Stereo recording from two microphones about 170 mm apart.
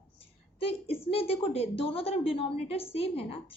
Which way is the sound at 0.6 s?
35° left (ahead or behind).